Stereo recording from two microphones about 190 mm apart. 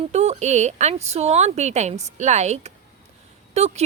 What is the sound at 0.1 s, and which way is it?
Speech, 35° right (ahead or behind).